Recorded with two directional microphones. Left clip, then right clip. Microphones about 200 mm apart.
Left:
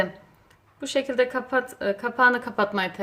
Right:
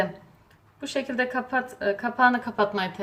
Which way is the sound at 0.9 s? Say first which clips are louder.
Left 4 dB; 55° left (ahead or behind).